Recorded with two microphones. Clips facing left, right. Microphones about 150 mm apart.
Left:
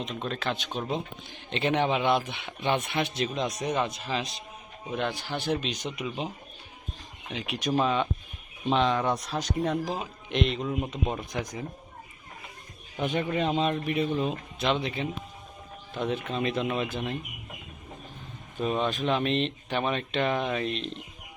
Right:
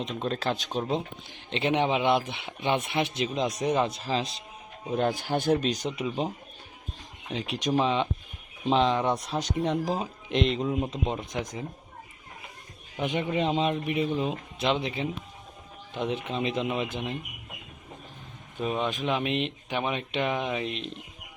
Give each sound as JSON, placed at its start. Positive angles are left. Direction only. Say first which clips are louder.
{"t": 0.3, "sound": "speech", "louder": "right 3 dB", "side_deg": -35}
{"t": 4.9, "sound": "speech", "louder": "right 4 dB", "side_deg": -40}
{"t": 7.8, "sound": "speech", "louder": "even", "side_deg": -20}
{"t": 13.0, "sound": "speech", "louder": "even", "side_deg": -20}
{"t": 18.6, "sound": "speech", "louder": "left 1 dB", "side_deg": -10}